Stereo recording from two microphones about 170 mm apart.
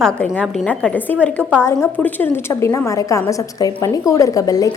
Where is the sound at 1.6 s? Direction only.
15° left (ahead or behind).